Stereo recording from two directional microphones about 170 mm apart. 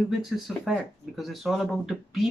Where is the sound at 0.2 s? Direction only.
Centre (ahead or behind).